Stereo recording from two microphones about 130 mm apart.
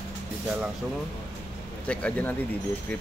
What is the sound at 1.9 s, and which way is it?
Speech, 10° left (ahead or behind).